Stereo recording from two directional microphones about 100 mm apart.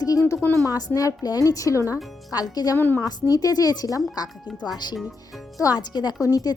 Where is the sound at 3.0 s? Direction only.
40° left (ahead or behind).